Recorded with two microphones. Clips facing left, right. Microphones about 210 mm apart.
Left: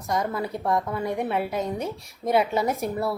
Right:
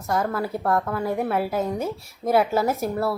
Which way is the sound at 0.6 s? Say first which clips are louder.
Right 1 dB; 15° left (ahead or behind).